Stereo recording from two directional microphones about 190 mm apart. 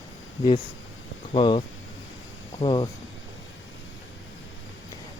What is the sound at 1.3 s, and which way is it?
Speech, 30° left (ahead or behind).